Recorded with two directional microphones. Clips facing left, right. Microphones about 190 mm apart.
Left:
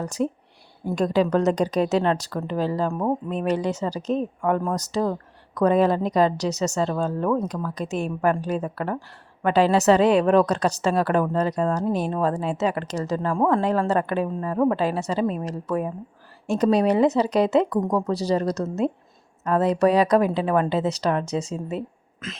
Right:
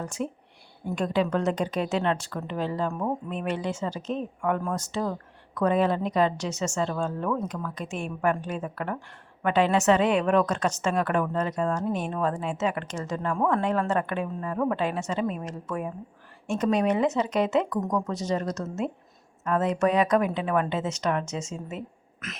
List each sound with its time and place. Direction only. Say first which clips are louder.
0.0 s a woman's voice: left 6 dB; 40° left (ahead or behind)